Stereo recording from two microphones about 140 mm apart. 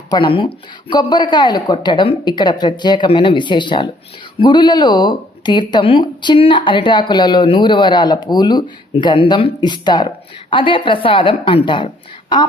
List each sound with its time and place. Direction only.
0.1 s speech: 35° left (ahead or behind)